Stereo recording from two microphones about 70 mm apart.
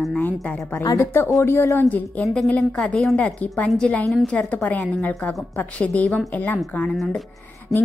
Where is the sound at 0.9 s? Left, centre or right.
Left.